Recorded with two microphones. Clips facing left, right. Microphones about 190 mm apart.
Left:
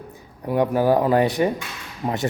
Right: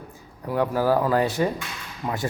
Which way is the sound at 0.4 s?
20° left (ahead or behind).